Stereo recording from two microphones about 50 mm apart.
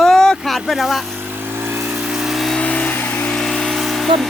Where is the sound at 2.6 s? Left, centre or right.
Left.